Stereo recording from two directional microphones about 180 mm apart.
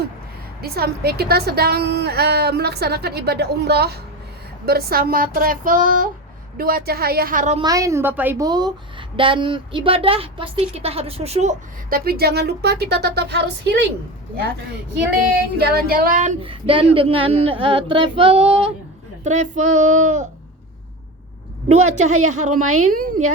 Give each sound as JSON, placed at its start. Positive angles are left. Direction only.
{"t": 0.6, "sound": "a woman's voice", "side_deg": -60}
{"t": 7.6, "sound": "a woman's voice", "side_deg": -20}
{"t": 8.4, "sound": "speech", "side_deg": -20}
{"t": 11.9, "sound": "a woman's voice", "side_deg": -55}
{"t": 15.5, "sound": "a woman's voice", "side_deg": -60}
{"t": 16.4, "sound": "speech", "side_deg": -30}
{"t": 19.2, "sound": "speech", "side_deg": -40}
{"t": 21.7, "sound": "a woman's voice", "side_deg": -40}